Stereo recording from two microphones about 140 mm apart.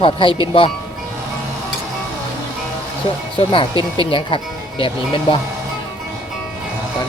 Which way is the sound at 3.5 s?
35° left (ahead or behind).